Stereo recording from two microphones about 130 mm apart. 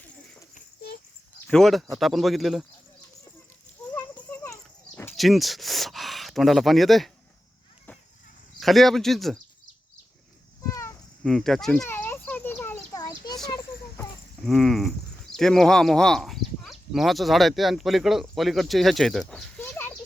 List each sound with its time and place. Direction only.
1.5 s speech: 5° left (ahead or behind)
4.3 s a sound: 20° left (ahead or behind)
5.1 s speech: centre (ahead or behind)
8.6 s speech: centre (ahead or behind)
11.2 s speech: centre (ahead or behind)
11.9 s a sound: 15° left (ahead or behind)
13.0 s children playing: 30° left (ahead or behind)
14.4 s speech: centre (ahead or behind)
19.5 s a sound: 15° left (ahead or behind)